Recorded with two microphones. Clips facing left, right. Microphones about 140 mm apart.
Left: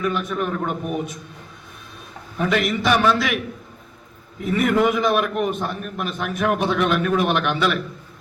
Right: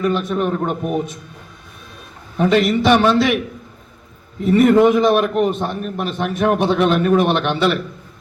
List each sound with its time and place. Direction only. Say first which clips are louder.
0.0 s a man's voice: right 5 dB; 30° right (ahead or behind)
2.4 s a man's voice: right 6 dB; 35° right (ahead or behind)
4.4 s a man's voice: right 7 dB; 35° right (ahead or behind)